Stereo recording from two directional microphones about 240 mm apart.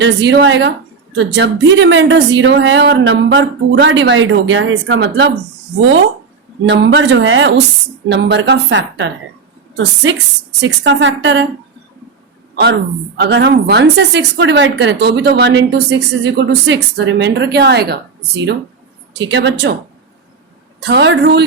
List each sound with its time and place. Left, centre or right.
0.0 s a woman's voice: right
6.7 s a woman's voice: right
13.1 s a woman's voice: right
19.1 s a woman's voice: right
20.8 s a woman's voice: right